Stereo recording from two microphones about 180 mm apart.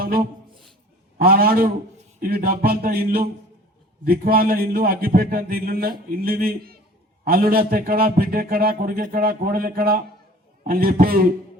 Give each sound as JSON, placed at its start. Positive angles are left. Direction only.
{"t": 1.2, "sound": "a man's voice", "side_deg": -55}